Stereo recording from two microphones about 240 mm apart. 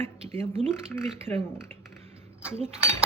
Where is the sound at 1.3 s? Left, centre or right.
Centre.